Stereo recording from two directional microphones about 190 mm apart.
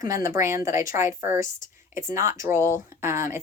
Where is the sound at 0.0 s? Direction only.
15° right (ahead or behind).